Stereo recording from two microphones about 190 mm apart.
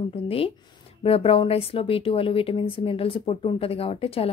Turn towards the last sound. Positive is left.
turn(degrees=30)  # may be behind; listen again after turning